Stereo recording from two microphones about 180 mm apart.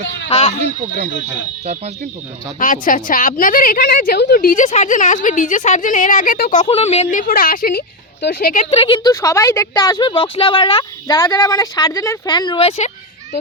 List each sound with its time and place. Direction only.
0.3 s speech: 35° left (ahead or behind)
2.6 s a woman's voice: 50° left (ahead or behind)
6.6 s speech: 35° left (ahead or behind)
7.2 s a woman's voice: 50° left (ahead or behind)
8.7 s speech: 25° left (ahead or behind)